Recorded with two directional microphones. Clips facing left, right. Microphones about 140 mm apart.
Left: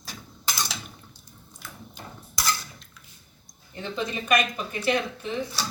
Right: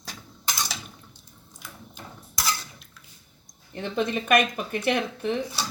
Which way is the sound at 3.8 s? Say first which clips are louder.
Right 4 dB; 55° right (ahead or behind).